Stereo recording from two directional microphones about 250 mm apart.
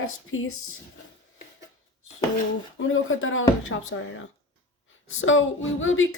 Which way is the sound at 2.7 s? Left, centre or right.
Left.